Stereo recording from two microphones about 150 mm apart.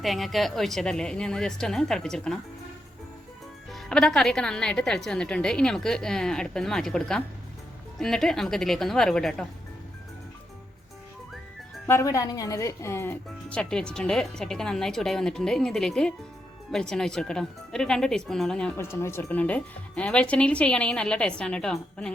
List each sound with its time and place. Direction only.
0.0 s a woman's voice: centre (ahead or behind)
3.7 s a woman's voice: 5° left (ahead or behind)
11.9 s speech: 20° left (ahead or behind)
13.6 s a woman's voice: 5° left (ahead or behind)
18.8 s a woman's voice: 15° left (ahead or behind)